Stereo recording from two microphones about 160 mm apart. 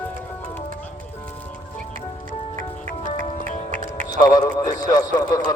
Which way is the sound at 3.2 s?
55° left (ahead or behind).